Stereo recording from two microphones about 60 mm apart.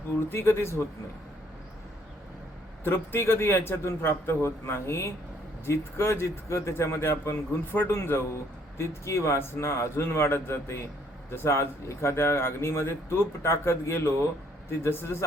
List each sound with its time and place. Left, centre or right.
0.3 s speech: left
2.8 s speech: left